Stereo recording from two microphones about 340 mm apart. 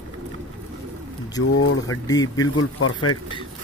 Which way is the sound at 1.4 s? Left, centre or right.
Left.